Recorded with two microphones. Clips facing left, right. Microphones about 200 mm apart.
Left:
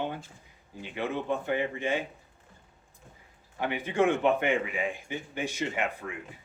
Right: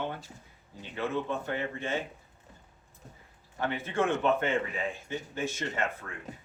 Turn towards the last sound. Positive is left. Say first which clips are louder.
# left 2 dB
turn(degrees=15)  # may be behind; listen again after turning